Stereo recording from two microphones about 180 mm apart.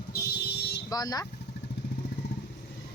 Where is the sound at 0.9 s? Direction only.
20° left (ahead or behind).